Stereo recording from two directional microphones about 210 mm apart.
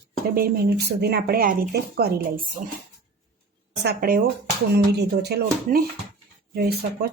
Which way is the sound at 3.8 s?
50° right (ahead or behind).